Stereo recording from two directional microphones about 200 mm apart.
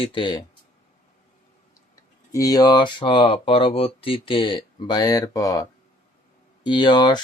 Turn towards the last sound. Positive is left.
turn(degrees=20)  # may be behind; listen again after turning